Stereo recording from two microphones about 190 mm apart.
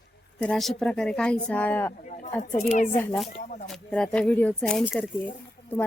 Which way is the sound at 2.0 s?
40° left (ahead or behind).